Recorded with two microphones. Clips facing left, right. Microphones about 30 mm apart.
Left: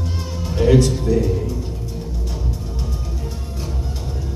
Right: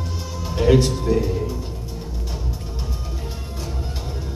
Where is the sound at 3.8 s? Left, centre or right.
Centre.